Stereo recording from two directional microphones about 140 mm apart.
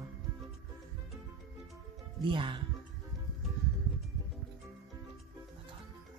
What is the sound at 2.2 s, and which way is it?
Speech, 35° right (ahead or behind).